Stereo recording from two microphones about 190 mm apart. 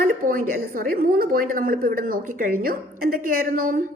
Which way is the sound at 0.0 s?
50° right (ahead or behind).